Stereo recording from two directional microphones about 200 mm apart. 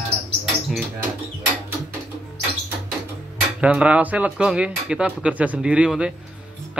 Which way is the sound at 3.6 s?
5° right (ahead or behind).